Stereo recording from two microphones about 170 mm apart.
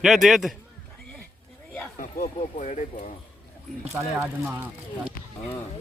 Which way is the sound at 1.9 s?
50° left (ahead or behind).